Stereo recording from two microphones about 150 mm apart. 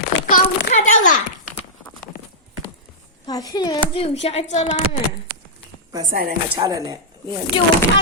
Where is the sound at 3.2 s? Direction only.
25° left (ahead or behind).